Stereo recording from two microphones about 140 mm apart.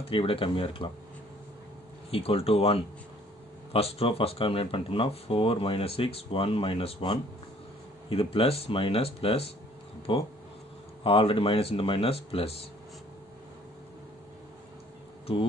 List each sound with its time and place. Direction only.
0.1 s speech: 40° left (ahead or behind)
2.0 s speech: 45° left (ahead or behind)